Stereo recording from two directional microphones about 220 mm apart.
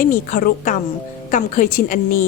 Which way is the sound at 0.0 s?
40° left (ahead or behind).